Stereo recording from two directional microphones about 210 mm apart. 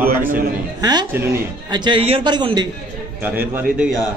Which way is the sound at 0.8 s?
20° right (ahead or behind).